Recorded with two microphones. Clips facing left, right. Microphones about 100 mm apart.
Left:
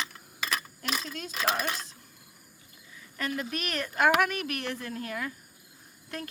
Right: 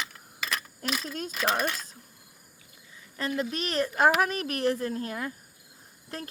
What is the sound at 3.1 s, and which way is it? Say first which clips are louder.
A woman's voice: right 3 dB; 30° right (ahead or behind).